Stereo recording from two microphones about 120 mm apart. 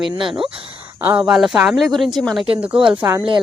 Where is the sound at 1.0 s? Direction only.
15° right (ahead or behind).